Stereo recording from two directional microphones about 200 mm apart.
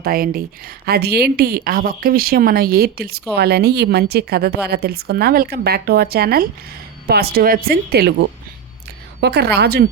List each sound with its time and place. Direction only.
0.0 s a woman's voice: 45° right (ahead or behind)